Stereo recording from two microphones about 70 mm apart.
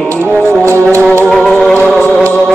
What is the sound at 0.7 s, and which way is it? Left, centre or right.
Music, right.